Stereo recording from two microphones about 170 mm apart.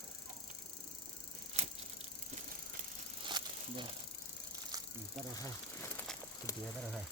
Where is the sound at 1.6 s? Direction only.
40° right (ahead or behind).